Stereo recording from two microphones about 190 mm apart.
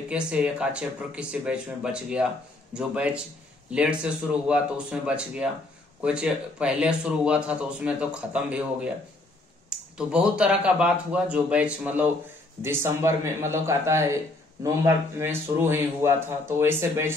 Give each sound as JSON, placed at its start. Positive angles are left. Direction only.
{"t": 0.1, "sound": "a man's voice", "side_deg": -5}